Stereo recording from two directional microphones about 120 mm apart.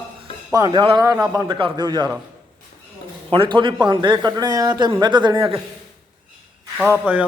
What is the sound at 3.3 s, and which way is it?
A man's voice, 45° right (ahead or behind).